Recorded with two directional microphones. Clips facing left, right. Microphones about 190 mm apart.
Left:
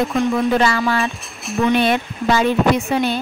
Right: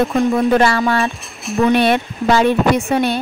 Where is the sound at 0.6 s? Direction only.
55° right (ahead or behind).